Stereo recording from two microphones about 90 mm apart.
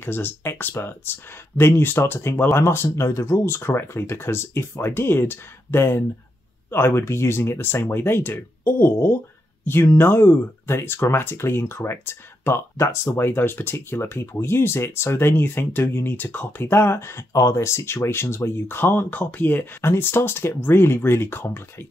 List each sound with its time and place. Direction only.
0.0 s speech: 25° left (ahead or behind)